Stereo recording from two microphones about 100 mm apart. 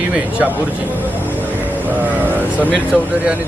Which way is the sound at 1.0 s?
15° right (ahead or behind).